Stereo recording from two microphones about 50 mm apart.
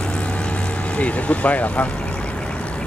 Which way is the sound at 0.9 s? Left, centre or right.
Left.